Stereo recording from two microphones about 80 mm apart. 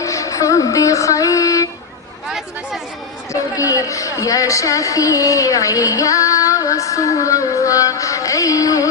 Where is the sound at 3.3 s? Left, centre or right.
Left.